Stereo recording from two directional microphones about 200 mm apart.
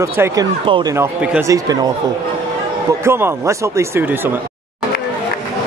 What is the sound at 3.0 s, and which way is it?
Speech, 10° right (ahead or behind).